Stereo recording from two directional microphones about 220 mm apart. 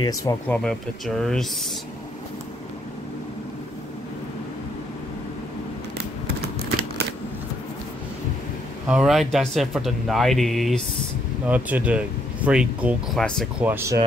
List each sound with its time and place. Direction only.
0.0 s speech: 15° left (ahead or behind)
0.7 s speech: centre (ahead or behind)
8.8 s speech: 5° right (ahead or behind)
13.7 s speech: 10° right (ahead or behind)